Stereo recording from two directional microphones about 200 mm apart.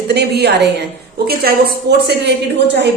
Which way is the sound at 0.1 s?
55° right (ahead or behind).